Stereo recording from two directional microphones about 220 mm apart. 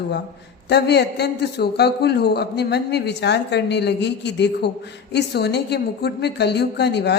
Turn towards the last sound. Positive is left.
turn(degrees=50)  # may be behind; listen again after turning